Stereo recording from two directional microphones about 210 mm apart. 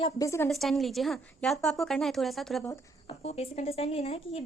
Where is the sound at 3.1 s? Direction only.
30° left (ahead or behind).